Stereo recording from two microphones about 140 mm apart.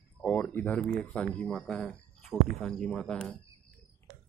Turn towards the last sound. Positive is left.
turn(degrees=5)  # may be behind; listen again after turning